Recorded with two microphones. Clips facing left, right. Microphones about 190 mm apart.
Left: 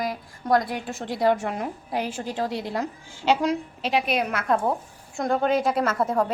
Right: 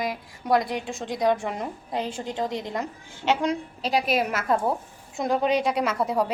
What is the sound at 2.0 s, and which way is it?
Speech, 25° right (ahead or behind).